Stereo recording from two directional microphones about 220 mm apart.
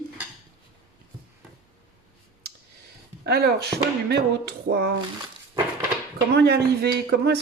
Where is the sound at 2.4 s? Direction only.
45° right (ahead or behind).